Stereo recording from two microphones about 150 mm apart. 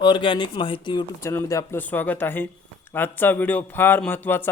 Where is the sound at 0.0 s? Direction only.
30° left (ahead or behind).